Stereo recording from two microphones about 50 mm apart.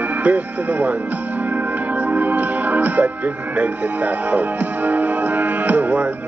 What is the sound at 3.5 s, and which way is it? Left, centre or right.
Speech, right.